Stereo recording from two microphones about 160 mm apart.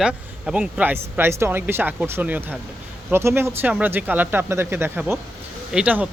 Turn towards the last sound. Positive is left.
turn(degrees=-10)  # may be behind; listen again after turning